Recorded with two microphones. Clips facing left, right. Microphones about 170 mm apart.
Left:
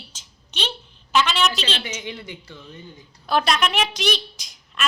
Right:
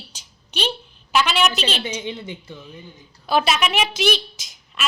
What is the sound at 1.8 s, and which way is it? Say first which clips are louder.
Speech: right 4 dB; 25° right (ahead or behind).